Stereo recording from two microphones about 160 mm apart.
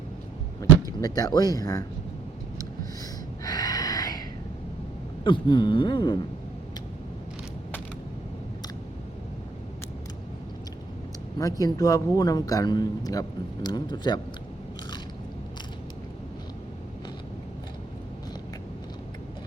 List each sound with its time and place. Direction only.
1.0 s a man's voice: 25° left (ahead or behind)
3.4 s a sound: 25° left (ahead or behind)
5.2 s a man's voice: 30° left (ahead or behind)
11.6 s a man's voice: 20° left (ahead or behind)